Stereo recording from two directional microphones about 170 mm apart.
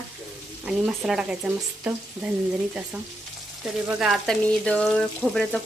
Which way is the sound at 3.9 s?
5° right (ahead or behind).